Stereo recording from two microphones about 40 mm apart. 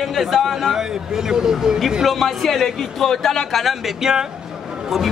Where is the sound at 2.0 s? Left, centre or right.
Centre.